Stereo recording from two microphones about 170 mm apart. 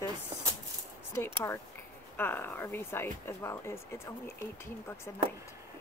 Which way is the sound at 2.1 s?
10° left (ahead or behind).